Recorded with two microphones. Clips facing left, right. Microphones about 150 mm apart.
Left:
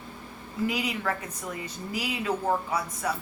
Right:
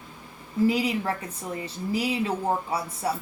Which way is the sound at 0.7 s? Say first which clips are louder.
Right 4 dB; 30° right (ahead or behind).